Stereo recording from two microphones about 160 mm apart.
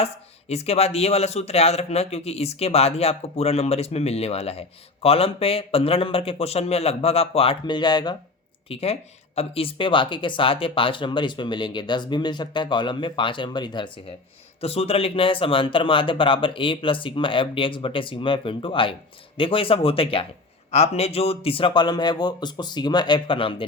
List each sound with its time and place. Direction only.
0.0 s speech: 40° left (ahead or behind)
8.7 s speech: 40° left (ahead or behind)